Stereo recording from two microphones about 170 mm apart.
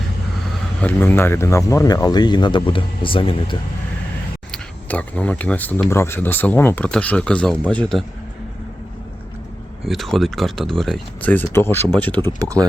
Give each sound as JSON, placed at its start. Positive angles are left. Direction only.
{"t": 0.5, "sound": "speech", "side_deg": 10}
{"t": 4.5, "sound": "speech", "side_deg": 10}
{"t": 9.8, "sound": "speech", "side_deg": 0}
{"t": 12.4, "sound": "speech", "side_deg": -20}